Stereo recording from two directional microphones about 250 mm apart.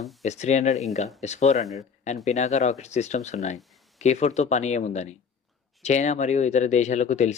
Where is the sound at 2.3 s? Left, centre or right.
Left.